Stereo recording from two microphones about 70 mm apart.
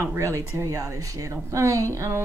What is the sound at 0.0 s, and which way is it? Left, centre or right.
Speech, right.